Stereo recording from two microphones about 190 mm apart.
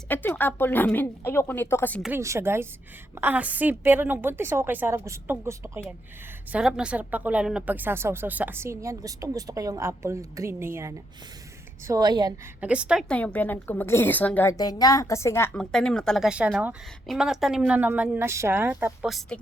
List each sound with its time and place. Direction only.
0.1 s a woman's voice: 10° left (ahead or behind)
2.0 s a woman's voice: 10° right (ahead or behind)
12.5 s a woman's voice: 5° right (ahead or behind)
13.1 s a woman's voice: 5° left (ahead or behind); by 19.1 s 10° right (ahead or behind)